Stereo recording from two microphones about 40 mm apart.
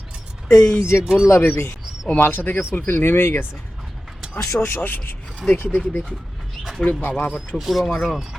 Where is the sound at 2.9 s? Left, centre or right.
Left.